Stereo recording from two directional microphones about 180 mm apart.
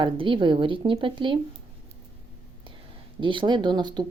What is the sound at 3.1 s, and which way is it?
Speech, 25° right (ahead or behind).